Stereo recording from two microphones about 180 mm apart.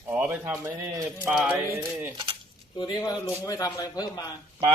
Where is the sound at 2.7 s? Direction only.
25° left (ahead or behind).